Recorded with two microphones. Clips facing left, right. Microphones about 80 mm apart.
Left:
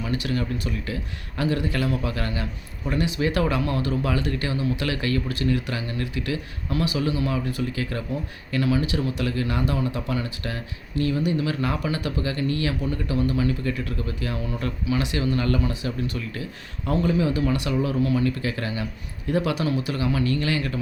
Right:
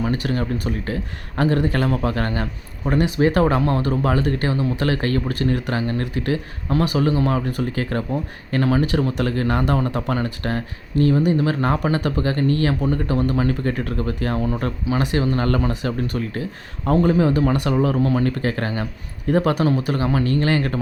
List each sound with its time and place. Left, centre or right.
0.0 s a man's voice: right